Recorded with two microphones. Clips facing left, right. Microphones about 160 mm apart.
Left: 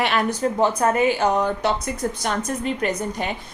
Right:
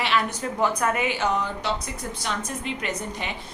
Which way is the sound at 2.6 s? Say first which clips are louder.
Left 7 dB; 45° left (ahead or behind).